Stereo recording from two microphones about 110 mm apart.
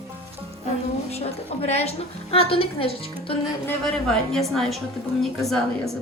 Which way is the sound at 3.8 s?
5° left (ahead or behind).